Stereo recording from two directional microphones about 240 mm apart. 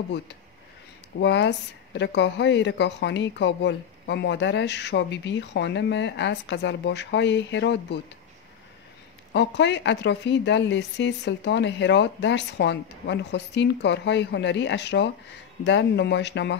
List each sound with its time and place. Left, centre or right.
1.2 s speech: left
9.3 s speech: left